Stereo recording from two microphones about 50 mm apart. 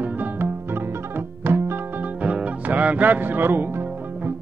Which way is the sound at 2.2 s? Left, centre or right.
Right.